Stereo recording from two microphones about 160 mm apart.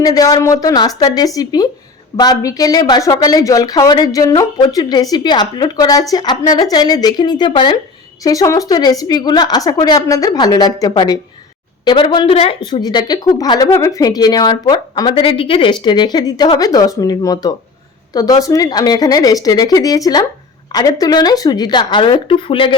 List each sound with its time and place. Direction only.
0.0 s speech: 20° left (ahead or behind)